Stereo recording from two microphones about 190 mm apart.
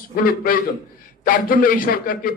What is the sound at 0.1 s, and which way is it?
A man's voice, 50° left (ahead or behind).